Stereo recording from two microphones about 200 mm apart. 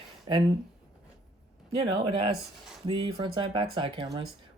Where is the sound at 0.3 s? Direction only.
20° right (ahead or behind).